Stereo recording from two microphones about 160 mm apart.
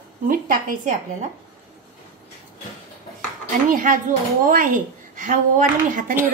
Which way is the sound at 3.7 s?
55° right (ahead or behind).